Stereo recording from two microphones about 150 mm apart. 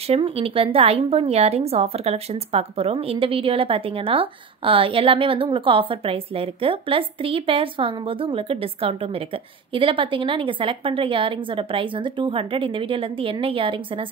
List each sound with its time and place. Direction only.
0.1 s a woman's voice: 40° right (ahead or behind)